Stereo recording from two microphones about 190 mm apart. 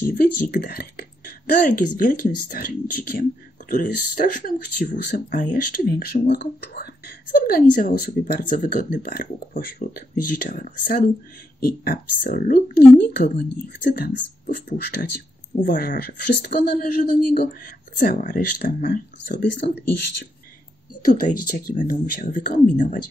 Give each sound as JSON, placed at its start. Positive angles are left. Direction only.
{"t": 0.0, "sound": "speech", "side_deg": 50}
{"t": 21.0, "sound": "speech", "side_deg": 45}